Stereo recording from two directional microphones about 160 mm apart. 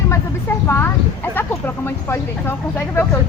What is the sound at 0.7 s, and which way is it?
Speech, 15° left (ahead or behind).